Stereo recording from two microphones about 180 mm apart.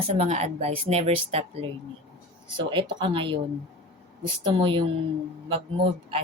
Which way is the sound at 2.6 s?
25° right (ahead or behind).